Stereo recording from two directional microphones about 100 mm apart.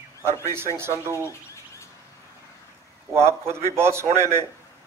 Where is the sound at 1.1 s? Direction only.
30° left (ahead or behind).